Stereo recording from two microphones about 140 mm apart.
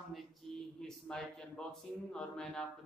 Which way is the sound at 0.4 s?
5° left (ahead or behind).